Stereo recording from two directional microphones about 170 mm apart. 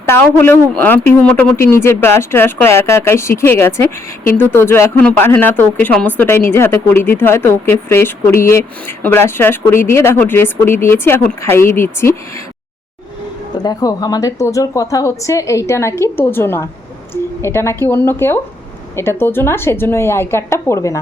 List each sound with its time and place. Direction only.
0.0 s speech: 15° left (ahead or behind)
13.6 s speech: 25° left (ahead or behind)